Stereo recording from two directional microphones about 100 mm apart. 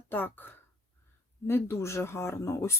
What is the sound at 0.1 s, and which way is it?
Speech, 20° left (ahead or behind).